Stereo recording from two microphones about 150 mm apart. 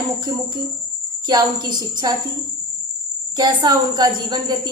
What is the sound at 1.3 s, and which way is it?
Speech, 30° right (ahead or behind).